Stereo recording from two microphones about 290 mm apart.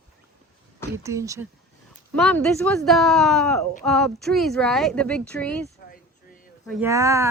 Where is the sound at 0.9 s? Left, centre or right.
Centre.